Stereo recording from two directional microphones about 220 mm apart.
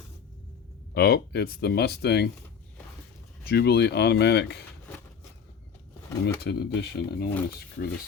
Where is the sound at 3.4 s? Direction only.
45° left (ahead or behind).